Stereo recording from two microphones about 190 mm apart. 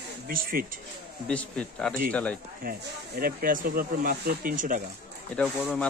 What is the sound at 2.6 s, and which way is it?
Speech, 50° right (ahead or behind).